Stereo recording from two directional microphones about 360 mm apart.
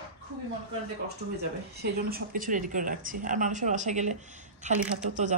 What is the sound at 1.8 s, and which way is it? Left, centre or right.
Speech, right.